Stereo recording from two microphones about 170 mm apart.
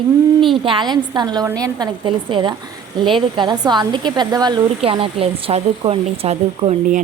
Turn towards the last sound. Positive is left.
turn(degrees=-45)  # may be behind; listen again after turning